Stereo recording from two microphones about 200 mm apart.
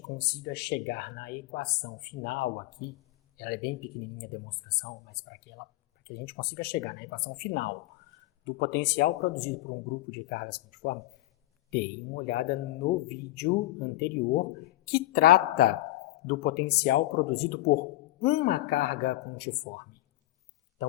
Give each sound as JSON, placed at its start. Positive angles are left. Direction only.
{"t": 0.2, "sound": "speech", "side_deg": 55}
{"t": 9.0, "sound": "speech", "side_deg": 40}